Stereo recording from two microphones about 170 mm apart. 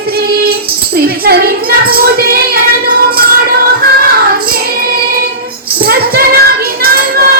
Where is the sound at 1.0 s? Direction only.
65° right (ahead or behind).